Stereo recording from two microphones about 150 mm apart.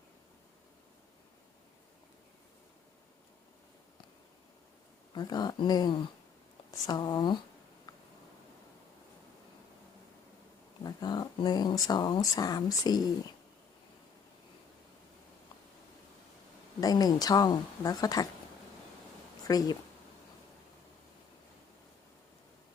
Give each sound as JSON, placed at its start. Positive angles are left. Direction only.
{"t": 5.1, "sound": "speech", "side_deg": 30}
{"t": 10.8, "sound": "speech", "side_deg": 30}
{"t": 16.8, "sound": "speech", "side_deg": 25}
{"t": 19.5, "sound": "speech", "side_deg": 25}